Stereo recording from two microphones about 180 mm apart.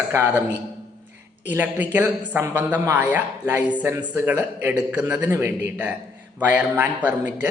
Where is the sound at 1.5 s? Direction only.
10° right (ahead or behind).